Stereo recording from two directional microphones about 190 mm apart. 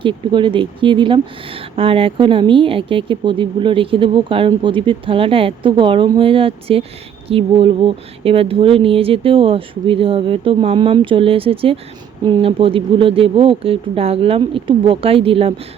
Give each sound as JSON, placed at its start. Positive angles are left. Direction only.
{"t": 0.0, "sound": "speech", "side_deg": -25}